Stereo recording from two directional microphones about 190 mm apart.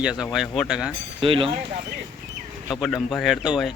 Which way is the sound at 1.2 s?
30° right (ahead or behind).